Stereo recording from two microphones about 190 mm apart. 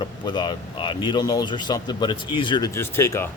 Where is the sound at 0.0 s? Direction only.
25° left (ahead or behind).